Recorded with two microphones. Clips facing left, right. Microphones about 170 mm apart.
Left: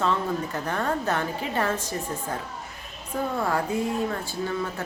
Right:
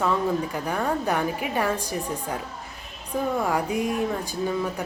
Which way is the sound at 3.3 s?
15° right (ahead or behind).